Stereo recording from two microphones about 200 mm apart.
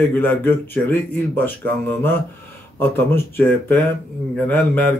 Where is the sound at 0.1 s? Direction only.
10° left (ahead or behind).